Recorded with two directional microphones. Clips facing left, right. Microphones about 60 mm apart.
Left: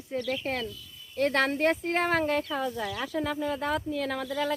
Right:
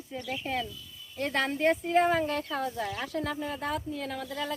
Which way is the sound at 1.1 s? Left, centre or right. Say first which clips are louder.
Left 4 dB; left.